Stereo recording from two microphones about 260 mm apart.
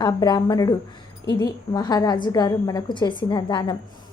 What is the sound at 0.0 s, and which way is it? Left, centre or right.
A woman's voice, centre.